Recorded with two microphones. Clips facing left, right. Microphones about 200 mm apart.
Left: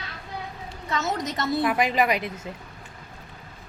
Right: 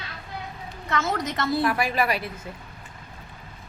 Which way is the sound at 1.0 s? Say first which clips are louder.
Right 1 dB; 20° left (ahead or behind).